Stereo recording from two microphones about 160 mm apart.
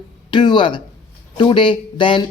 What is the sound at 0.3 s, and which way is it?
Speech, 30° left (ahead or behind).